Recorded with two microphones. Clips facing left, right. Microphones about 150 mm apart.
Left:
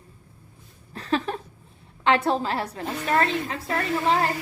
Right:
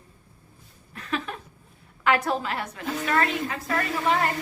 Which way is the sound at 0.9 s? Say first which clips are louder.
Left 5 dB; 35° left (ahead or behind).